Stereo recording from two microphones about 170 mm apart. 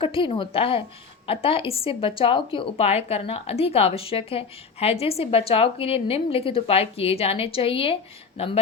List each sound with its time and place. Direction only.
0.0 s a woman's voice: 30° left (ahead or behind)